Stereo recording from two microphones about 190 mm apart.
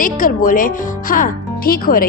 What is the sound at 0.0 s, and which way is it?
Speech, 45° left (ahead or behind).